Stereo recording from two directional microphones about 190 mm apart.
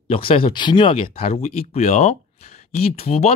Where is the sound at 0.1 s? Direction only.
30° left (ahead or behind).